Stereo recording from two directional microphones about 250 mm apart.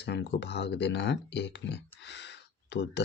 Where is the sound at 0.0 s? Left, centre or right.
Left.